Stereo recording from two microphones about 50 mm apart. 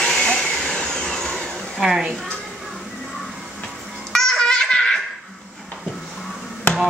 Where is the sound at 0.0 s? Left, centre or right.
Centre.